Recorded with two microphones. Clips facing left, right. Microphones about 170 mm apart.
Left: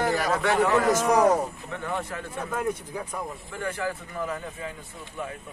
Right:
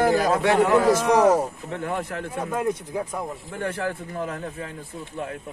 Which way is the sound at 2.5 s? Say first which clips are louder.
Right 3 dB; 15° right (ahead or behind).